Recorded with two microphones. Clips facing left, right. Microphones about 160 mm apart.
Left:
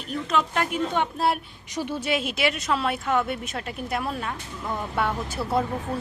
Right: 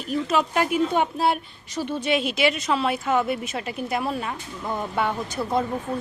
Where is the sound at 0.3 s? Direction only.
5° right (ahead or behind).